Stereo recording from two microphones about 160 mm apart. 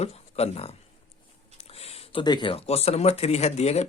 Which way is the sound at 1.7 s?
40° left (ahead or behind).